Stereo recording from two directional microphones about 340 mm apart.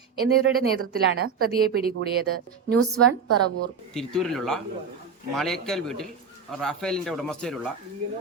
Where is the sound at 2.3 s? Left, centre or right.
Right.